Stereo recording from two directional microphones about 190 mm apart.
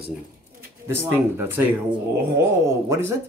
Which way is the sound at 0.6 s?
10° right (ahead or behind).